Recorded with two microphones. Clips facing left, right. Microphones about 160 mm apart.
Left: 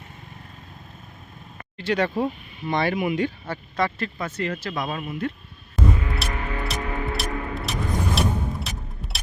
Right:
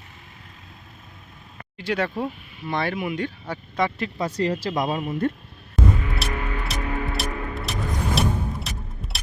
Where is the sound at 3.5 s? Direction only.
15° right (ahead or behind).